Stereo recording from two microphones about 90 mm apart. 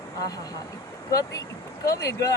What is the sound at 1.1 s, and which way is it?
Speech, 40° left (ahead or behind).